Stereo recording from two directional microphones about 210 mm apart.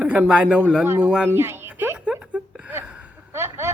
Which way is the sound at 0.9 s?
5° right (ahead or behind).